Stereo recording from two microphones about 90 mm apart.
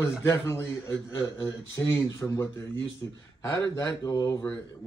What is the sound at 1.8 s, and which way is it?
Speech, 35° left (ahead or behind).